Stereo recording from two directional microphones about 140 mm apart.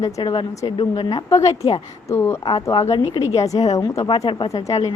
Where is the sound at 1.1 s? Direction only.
25° left (ahead or behind).